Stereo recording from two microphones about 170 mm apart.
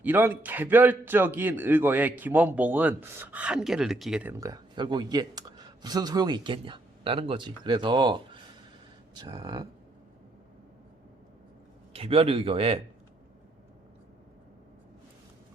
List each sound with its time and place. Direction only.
0.0 s a man's voice: 10° right (ahead or behind)
4.4 s speech: 20° right (ahead or behind)
11.9 s speech: 35° right (ahead or behind)